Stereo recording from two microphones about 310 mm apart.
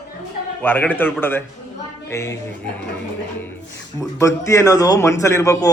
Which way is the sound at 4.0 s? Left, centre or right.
Centre.